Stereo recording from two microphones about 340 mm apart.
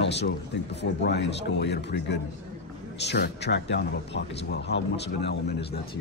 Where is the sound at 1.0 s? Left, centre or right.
Left.